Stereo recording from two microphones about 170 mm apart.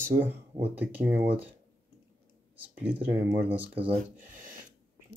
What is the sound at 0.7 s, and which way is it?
Speech, 10° right (ahead or behind).